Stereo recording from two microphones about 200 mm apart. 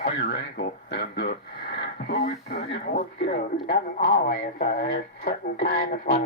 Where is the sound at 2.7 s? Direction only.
45° left (ahead or behind).